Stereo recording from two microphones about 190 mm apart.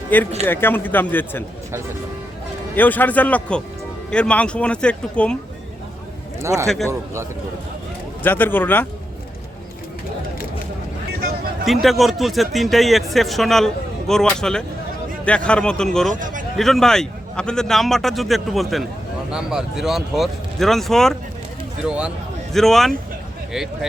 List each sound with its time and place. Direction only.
0.1 s a man's voice: 10° left (ahead or behind)
2.7 s a man's voice: 10° left (ahead or behind)
6.4 s a man's voice: 15° right (ahead or behind)
8.2 s a man's voice: 10° left (ahead or behind)
11.6 s a man's voice: centre (ahead or behind)
16.1 s speech: 45° right (ahead or behind)
16.6 s a man's voice: centre (ahead or behind)